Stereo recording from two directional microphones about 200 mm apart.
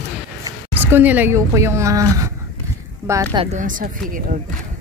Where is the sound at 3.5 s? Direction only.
40° right (ahead or behind).